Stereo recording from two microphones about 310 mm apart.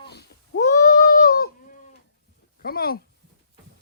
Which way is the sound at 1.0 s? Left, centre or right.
Left.